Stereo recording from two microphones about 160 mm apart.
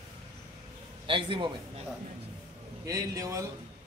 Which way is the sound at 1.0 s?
30° right (ahead or behind).